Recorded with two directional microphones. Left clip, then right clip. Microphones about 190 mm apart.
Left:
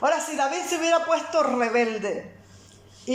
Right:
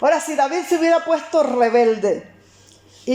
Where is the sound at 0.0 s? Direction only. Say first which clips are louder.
Right 6 dB; 30° right (ahead or behind).